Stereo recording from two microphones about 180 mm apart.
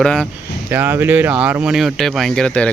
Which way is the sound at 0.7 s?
10° right (ahead or behind).